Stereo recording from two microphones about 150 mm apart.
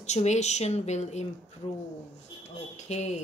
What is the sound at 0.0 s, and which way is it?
Speech, 50° left (ahead or behind).